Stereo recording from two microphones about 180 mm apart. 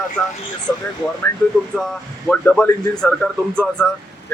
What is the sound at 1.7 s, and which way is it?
Speech, 5° left (ahead or behind).